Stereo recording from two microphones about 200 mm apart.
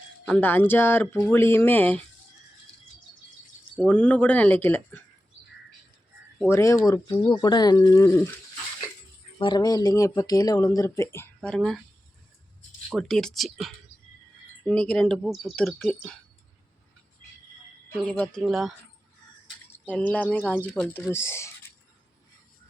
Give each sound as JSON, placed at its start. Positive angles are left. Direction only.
{"t": 0.3, "sound": "speech", "side_deg": 10}
{"t": 3.8, "sound": "speech", "side_deg": 5}
{"t": 6.5, "sound": "speech", "side_deg": 15}
{"t": 9.4, "sound": "speech", "side_deg": 20}
{"t": 12.9, "sound": "speech", "side_deg": 0}
{"t": 18.0, "sound": "speech", "side_deg": 5}
{"t": 19.9, "sound": "speech", "side_deg": 5}